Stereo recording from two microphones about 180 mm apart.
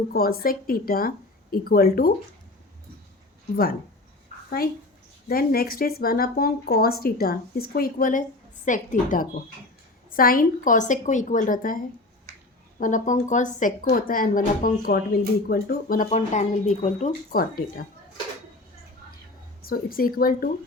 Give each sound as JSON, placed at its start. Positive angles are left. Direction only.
{"t": 0.1, "sound": "speech", "side_deg": 55}
{"t": 4.4, "sound": "a woman's voice", "side_deg": 60}
{"t": 12.8, "sound": "a woman's voice", "side_deg": 45}
{"t": 17.3, "sound": "a woman's voice", "side_deg": 55}
{"t": 19.6, "sound": "a woman's voice", "side_deg": 55}